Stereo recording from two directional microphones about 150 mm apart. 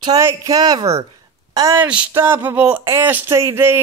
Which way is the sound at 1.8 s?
10° right (ahead or behind).